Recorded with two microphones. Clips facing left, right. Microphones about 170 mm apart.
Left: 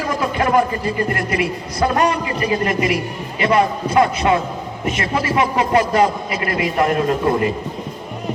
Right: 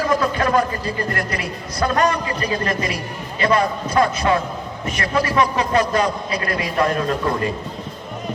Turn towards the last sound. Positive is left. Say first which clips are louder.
# left 4 dB
turn(degrees=25)  # may be behind; listen again after turning